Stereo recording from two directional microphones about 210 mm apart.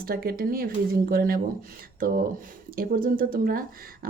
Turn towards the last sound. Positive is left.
turn(degrees=-40)  # may be behind; listen again after turning